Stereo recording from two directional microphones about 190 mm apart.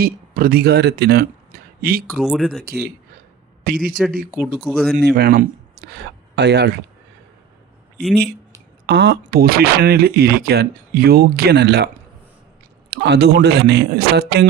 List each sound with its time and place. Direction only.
0.0 s speech: 50° right (ahead or behind)
2.1 s speech: centre (ahead or behind)
2.6 s a man's voice: 55° right (ahead or behind)
4.6 s speech: centre (ahead or behind)
5.1 s speech: 55° right (ahead or behind)
8.9 s speech: 65° right (ahead or behind)
9.2 s speech: 50° right (ahead or behind)
12.9 s speech: 60° right (ahead or behind)